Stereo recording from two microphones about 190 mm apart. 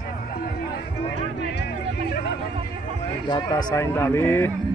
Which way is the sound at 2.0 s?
55° left (ahead or behind).